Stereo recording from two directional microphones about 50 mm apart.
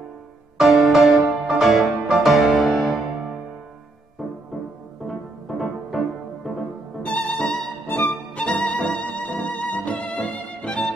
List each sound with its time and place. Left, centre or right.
0.6 s music: centre
5.5 s music: centre
7.0 s music: left